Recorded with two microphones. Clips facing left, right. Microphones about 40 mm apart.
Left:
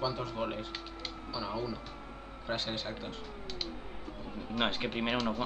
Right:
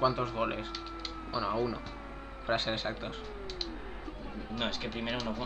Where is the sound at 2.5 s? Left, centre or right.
Right.